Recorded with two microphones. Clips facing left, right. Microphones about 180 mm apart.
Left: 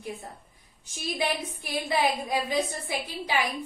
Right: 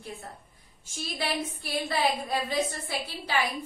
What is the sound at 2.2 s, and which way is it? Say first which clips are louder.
Speech: left 1 dB; 15° left (ahead or behind).